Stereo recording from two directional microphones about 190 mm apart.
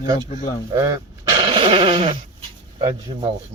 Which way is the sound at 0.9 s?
25° right (ahead or behind).